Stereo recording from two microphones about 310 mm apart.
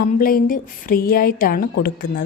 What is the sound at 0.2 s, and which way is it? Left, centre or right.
A woman's voice, left.